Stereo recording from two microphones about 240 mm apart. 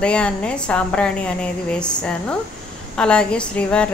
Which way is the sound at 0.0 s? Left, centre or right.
Centre.